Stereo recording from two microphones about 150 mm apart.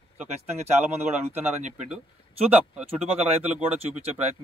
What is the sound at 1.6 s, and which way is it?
Speech, 55° right (ahead or behind).